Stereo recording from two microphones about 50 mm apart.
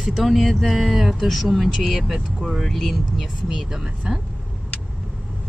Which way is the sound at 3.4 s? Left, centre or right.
Centre.